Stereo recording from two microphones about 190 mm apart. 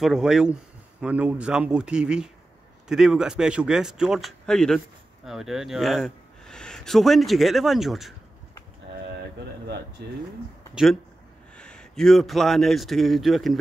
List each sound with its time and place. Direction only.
0.0 s speech: 5° right (ahead or behind)
10.0 s speech: 60° right (ahead or behind)
10.7 s a man's voice: centre (ahead or behind)